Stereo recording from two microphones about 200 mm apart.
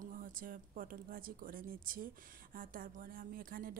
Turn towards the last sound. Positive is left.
turn(degrees=-45)  # may be behind; listen again after turning